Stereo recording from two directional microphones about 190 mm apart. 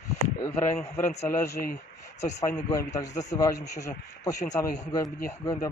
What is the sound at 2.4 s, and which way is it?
Speech, 15° left (ahead or behind).